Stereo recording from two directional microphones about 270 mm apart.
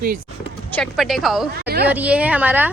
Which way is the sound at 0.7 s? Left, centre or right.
Centre.